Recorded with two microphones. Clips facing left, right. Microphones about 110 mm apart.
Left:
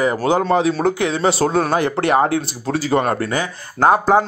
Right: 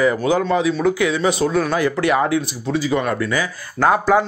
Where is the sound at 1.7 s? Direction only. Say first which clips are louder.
Left 1 dB; 30° left (ahead or behind).